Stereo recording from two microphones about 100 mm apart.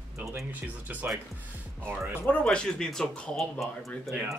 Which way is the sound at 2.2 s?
10° left (ahead or behind).